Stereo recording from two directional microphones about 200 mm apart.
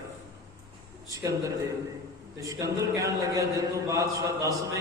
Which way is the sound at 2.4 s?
15° right (ahead or behind).